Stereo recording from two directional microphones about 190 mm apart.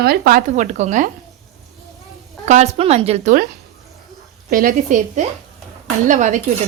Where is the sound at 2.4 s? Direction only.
35° right (ahead or behind).